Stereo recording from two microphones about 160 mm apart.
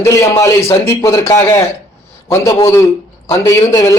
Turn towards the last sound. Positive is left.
turn(degrees=20)  # may be behind; listen again after turning